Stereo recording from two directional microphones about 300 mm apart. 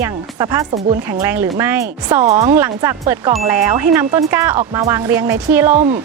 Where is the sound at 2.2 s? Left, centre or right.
Right.